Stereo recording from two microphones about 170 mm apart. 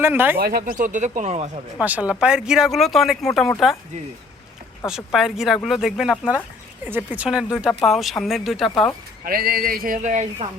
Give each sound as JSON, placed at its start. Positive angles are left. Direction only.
{"t": 0.0, "sound": "speech", "side_deg": -10}
{"t": 0.3, "sound": "speech", "side_deg": -65}
{"t": 1.8, "sound": "speech", "side_deg": -10}
{"t": 4.9, "sound": "speech", "side_deg": 0}
{"t": 9.2, "sound": "speech", "side_deg": -60}